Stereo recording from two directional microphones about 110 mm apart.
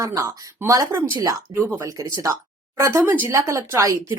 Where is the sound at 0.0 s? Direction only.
30° right (ahead or behind).